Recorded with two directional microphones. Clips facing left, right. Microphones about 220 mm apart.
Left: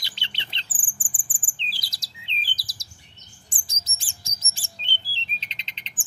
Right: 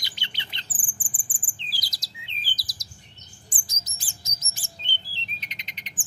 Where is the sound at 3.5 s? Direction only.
25° left (ahead or behind).